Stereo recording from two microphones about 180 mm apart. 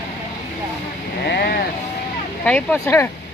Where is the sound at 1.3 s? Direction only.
65° left (ahead or behind).